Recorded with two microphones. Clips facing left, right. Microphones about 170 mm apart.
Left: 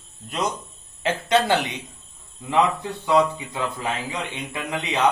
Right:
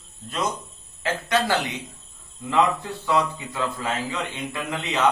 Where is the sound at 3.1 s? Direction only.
20° left (ahead or behind).